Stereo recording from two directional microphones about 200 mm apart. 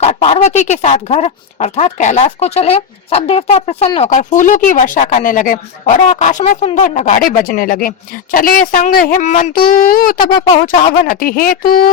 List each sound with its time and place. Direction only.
0.0 s speech: 30° left (ahead or behind)